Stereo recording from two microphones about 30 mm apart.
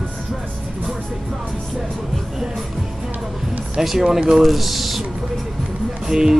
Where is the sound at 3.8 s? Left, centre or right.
Centre.